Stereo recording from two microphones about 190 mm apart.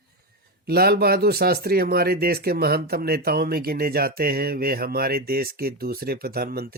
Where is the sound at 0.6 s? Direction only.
55° right (ahead or behind).